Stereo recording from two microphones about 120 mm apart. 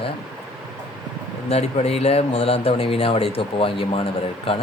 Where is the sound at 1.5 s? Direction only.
60° left (ahead or behind).